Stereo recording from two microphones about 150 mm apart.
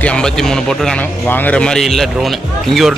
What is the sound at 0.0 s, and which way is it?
A man's voice, 5° left (ahead or behind).